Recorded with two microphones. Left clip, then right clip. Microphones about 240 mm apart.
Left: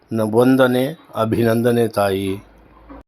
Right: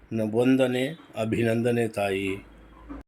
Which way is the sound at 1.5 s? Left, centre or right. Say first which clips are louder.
Left 8 dB; centre.